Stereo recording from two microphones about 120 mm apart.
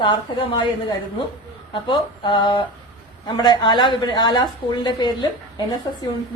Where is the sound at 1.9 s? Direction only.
40° left (ahead or behind).